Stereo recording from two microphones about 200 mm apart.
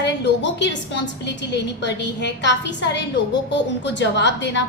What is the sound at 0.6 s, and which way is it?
A woman's voice, 60° left (ahead or behind).